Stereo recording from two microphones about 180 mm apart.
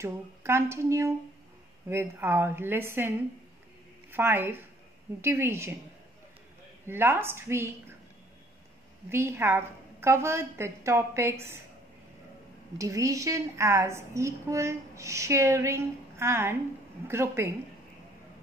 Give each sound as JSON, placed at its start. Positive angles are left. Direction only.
{"t": 0.0, "sound": "a woman's voice", "side_deg": -15}
{"t": 6.9, "sound": "a woman's voice", "side_deg": -10}
{"t": 9.1, "sound": "a woman's voice", "side_deg": -15}
{"t": 12.7, "sound": "a woman's voice", "side_deg": -20}